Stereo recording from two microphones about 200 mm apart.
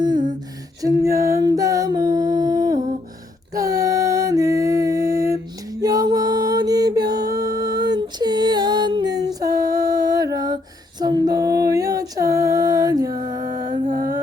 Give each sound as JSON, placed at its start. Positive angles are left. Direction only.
{"t": 0.8, "sound": "music", "side_deg": -15}
{"t": 13.8, "sound": "music", "side_deg": -40}